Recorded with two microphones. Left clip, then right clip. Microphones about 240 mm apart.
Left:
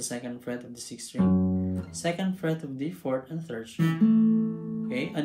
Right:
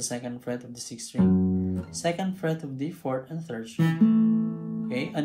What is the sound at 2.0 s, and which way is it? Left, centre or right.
Speech, centre.